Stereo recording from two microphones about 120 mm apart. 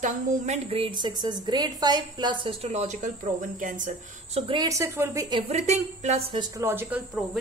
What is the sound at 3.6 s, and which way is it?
Speech, 90° right.